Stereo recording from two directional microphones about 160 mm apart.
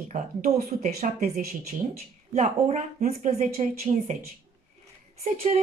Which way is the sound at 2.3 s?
50° right (ahead or behind).